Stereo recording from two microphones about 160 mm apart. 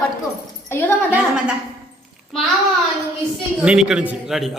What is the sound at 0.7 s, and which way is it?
Speech, 15° left (ahead or behind).